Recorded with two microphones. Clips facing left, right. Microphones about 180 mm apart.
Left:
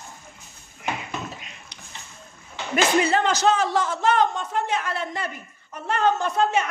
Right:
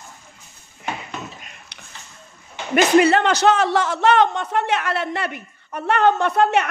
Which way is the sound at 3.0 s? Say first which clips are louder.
Right 5 dB; 70° right (ahead or behind).